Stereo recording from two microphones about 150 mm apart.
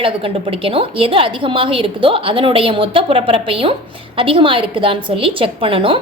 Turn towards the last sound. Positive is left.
turn(degrees=-35)  # may be behind; listen again after turning